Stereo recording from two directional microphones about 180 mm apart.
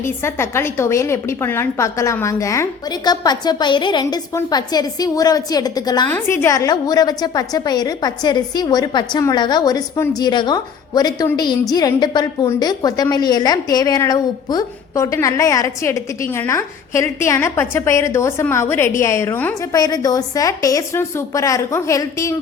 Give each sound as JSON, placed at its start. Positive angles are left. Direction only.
{"t": 0.0, "sound": "a woman's voice", "side_deg": 15}